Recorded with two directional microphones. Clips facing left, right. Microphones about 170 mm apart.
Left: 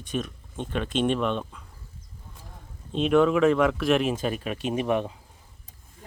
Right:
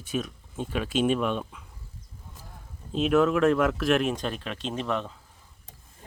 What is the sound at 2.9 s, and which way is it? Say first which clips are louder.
Speech: left 2 dB; centre (ahead or behind).